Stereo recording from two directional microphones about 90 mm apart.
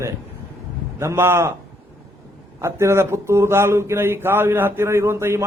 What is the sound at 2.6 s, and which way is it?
Speech, 30° right (ahead or behind).